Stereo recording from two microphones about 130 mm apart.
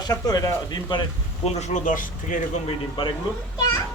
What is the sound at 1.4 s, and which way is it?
Speech, 65° left (ahead or behind).